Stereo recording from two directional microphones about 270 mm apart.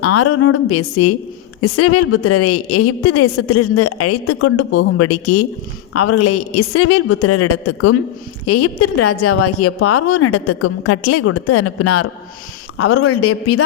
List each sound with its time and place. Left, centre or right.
0.0 s a woman's voice: left